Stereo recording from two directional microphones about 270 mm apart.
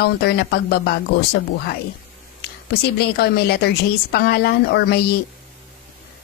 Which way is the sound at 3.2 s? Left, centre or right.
Left.